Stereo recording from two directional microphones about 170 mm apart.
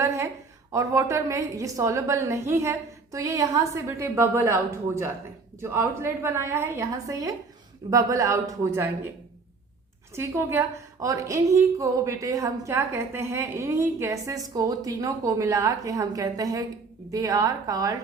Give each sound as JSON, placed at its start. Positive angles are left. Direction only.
{"t": 0.0, "sound": "a sound", "side_deg": -15}
{"t": 0.7, "sound": "a woman's voice", "side_deg": -20}
{"t": 10.2, "sound": "a woman's voice", "side_deg": -15}